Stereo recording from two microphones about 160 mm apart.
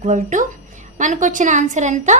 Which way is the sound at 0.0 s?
50° right (ahead or behind).